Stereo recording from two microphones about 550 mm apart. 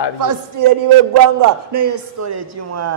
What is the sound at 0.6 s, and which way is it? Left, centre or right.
A man's voice, right.